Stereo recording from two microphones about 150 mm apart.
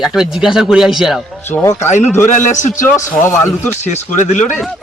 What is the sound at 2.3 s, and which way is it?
Speech, 55° left (ahead or behind).